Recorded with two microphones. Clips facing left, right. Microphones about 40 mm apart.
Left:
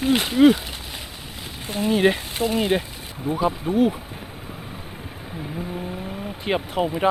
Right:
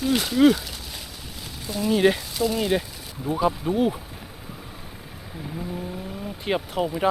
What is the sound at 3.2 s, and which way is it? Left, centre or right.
Speech, centre.